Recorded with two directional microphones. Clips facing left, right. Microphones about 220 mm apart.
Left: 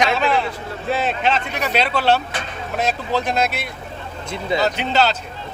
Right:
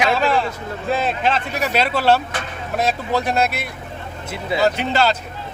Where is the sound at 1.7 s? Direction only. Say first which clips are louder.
Even; 45° right (ahead or behind).